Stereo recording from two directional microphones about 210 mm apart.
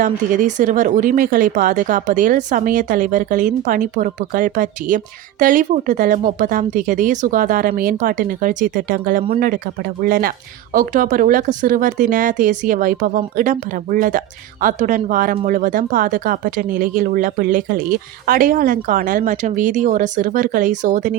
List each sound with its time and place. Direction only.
0.0 s speech: 35° right (ahead or behind)